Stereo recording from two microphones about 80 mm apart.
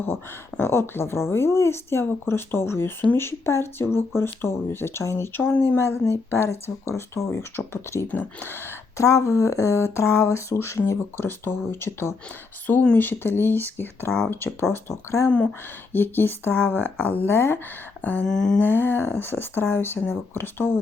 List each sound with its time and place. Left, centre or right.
0.0 s speech: left
8.1 s speech: left
9.0 s speech: left
18.3 s a sound: centre
18.6 s speech: left